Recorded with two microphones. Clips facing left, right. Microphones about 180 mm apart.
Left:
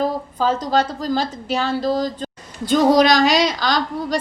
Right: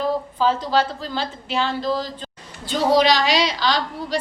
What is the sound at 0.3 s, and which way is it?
A woman's voice, 45° left (ahead or behind).